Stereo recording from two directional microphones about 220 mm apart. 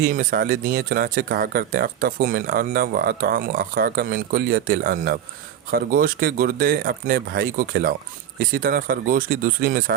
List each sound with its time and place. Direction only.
0.0 s speech: 40° right (ahead or behind)